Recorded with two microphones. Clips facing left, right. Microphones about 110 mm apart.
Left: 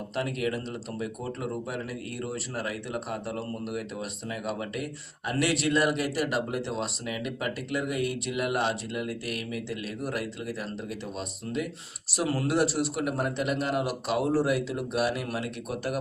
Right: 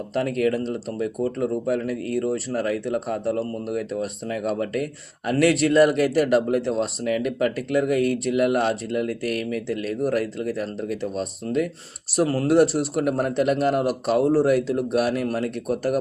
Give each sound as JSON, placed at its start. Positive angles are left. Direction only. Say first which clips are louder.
{"t": 0.1, "sound": "speech", "louder": "right 8 dB", "side_deg": -45}